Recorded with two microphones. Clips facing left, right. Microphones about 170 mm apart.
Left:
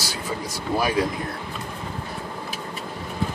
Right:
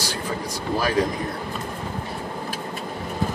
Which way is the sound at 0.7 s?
15° left (ahead or behind).